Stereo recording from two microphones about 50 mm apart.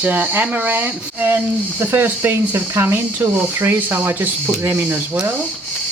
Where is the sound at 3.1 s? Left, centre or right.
Right.